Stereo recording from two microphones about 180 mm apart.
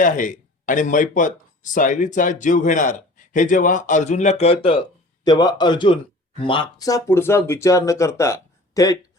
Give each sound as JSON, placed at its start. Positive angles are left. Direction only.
{"t": 0.0, "sound": "speech", "side_deg": 45}
{"t": 5.2, "sound": "a man's voice", "side_deg": 20}